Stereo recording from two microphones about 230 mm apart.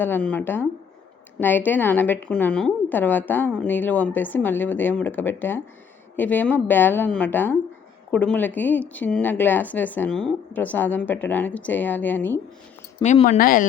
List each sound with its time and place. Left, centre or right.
0.0 s a woman's voice: centre
13.0 s speech: left